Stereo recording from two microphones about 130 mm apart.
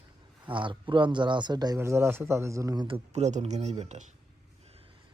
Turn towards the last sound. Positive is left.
turn(degrees=-60)  # may be behind; listen again after turning